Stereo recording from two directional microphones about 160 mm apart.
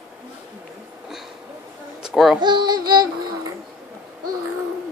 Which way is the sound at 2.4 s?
30° right (ahead or behind).